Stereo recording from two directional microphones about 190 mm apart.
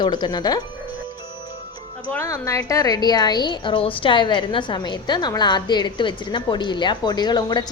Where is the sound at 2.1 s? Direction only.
15° left (ahead or behind).